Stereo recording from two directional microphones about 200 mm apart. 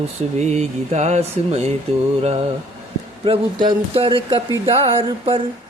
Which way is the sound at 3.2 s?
25° right (ahead or behind).